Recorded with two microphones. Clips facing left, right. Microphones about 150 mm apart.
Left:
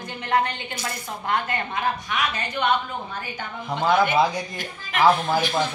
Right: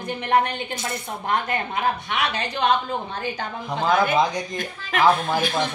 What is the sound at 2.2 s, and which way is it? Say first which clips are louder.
Speech: right 2 dB; 80° right.